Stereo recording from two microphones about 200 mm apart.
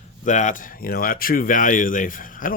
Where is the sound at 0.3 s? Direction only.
40° left (ahead or behind).